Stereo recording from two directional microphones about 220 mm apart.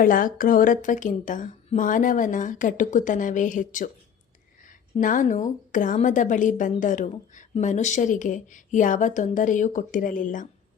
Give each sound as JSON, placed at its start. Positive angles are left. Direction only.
{"t": 0.0, "sound": "a woman's voice", "side_deg": 40}